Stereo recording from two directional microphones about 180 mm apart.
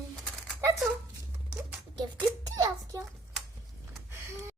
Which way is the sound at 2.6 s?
20° right (ahead or behind).